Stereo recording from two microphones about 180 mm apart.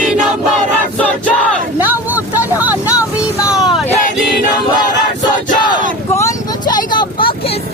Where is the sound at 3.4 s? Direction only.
Centre (ahead or behind).